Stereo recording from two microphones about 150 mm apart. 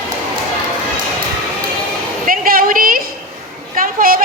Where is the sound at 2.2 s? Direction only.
70° right (ahead or behind).